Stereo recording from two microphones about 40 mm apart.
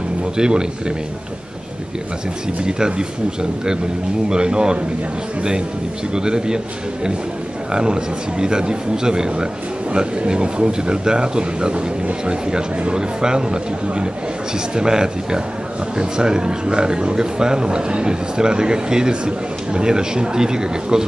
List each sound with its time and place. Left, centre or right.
0.4 s speech: centre
2.6 s speech: centre
4.3 s speech: right
6.1 s speech: centre
7.7 s speech: right